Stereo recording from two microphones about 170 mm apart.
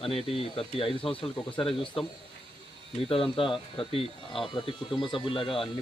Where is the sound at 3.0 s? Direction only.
35° left (ahead or behind).